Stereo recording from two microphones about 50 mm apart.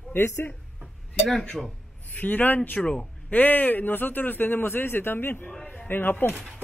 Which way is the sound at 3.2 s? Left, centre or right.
Left.